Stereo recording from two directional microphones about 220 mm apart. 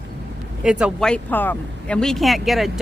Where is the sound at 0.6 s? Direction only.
5° right (ahead or behind).